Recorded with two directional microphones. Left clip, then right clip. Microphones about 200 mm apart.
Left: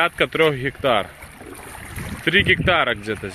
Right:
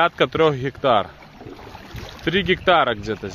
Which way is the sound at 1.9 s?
20° right (ahead or behind).